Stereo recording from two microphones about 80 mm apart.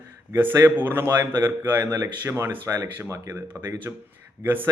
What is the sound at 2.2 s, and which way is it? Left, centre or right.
Speech, right.